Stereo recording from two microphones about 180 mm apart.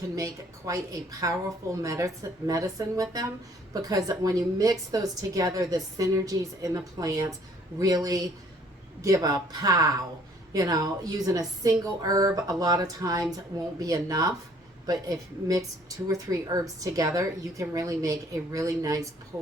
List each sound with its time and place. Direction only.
0.2 s a woman's voice: 20° right (ahead or behind)